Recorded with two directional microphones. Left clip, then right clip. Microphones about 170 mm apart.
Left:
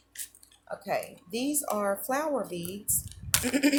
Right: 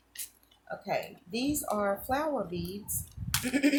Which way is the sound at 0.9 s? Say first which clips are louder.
Left 2 dB; 35° left (ahead or behind).